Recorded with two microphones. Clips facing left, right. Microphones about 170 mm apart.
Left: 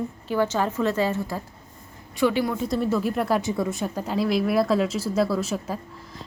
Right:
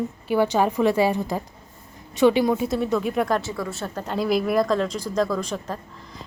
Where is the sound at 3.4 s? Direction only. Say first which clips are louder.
Left 4 dB; 20° left (ahead or behind).